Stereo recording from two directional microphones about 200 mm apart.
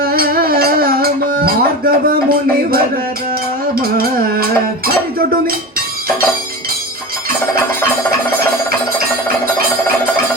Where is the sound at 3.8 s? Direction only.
50° right (ahead or behind).